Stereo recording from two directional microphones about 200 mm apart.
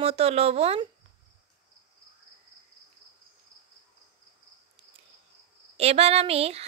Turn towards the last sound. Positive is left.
turn(degrees=-30)  # may be behind; listen again after turning